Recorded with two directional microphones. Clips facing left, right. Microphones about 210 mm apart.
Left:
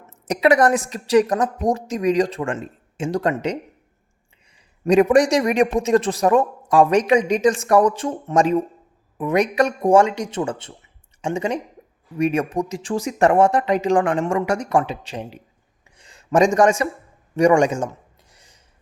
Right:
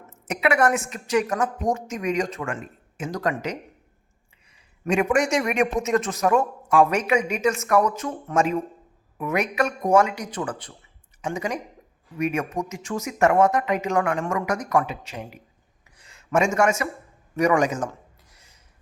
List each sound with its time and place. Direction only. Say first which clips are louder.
0.1 s a woman's voice: left 6 dB; 35° left (ahead or behind)
4.9 s a woman's voice: left 7 dB; 35° left (ahead or behind)
18.3 s a sound: left 3 dB; 30° left (ahead or behind)